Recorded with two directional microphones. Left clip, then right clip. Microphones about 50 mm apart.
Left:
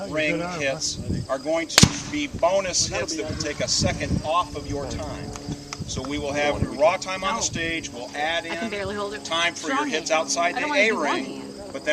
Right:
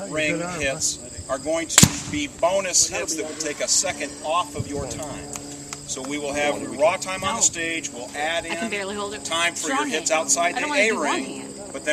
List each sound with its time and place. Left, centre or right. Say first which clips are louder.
0.1 s speech: even; centre
6.1 s speech: even; centre
8.7 s speech: right 1 dB; right
9.3 s speech: right 1 dB; centre